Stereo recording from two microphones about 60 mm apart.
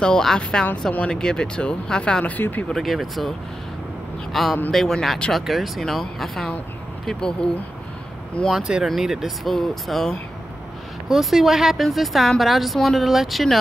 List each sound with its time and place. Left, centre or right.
0.0 s speech: centre
2.3 s speech: left
2.7 s a woman's voice: centre
8.8 s a woman's voice: centre